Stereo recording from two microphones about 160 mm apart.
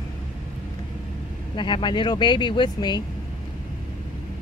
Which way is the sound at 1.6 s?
30° left (ahead or behind).